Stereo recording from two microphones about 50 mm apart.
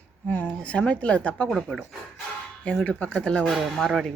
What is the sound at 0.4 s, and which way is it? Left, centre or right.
Speech, left.